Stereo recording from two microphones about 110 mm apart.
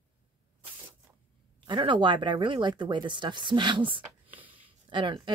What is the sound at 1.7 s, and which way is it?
Speech, 45° right (ahead or behind).